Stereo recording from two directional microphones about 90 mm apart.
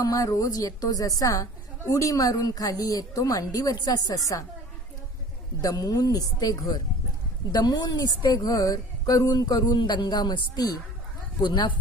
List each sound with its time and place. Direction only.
0.0 s a woman's voice: 40° left (ahead or behind)
5.6 s speech: 45° left (ahead or behind)